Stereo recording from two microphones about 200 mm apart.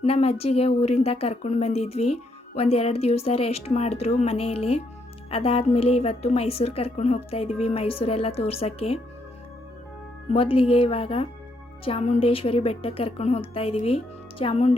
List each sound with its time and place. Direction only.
0.0 s a woman's voice: 30° left (ahead or behind)
10.3 s a woman's voice: 25° left (ahead or behind)